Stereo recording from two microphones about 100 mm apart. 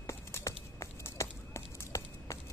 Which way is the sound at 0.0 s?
30° left (ahead or behind).